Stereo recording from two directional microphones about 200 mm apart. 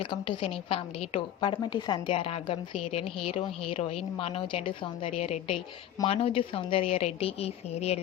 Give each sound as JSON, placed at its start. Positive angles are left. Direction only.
{"t": 0.0, "sound": "a woman's voice", "side_deg": 25}